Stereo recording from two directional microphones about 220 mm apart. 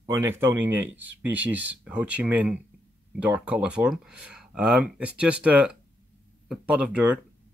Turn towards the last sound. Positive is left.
turn(degrees=-5)  # may be behind; listen again after turning